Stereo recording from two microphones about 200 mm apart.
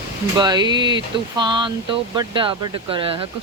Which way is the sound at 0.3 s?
20° right (ahead or behind).